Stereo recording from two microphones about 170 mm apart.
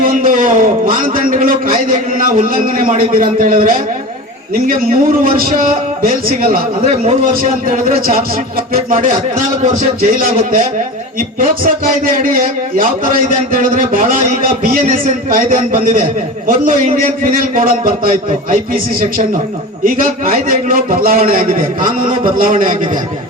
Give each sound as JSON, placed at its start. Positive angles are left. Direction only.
{"t": 0.0, "sound": "a man's voice", "side_deg": -55}
{"t": 6.8, "sound": "a man's voice", "side_deg": -40}
{"t": 7.7, "sound": "a man's voice", "side_deg": -55}
{"t": 10.2, "sound": "a man's voice", "side_deg": -55}